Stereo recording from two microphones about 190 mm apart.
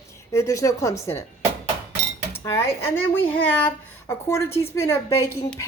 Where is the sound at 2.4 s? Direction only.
15° left (ahead or behind).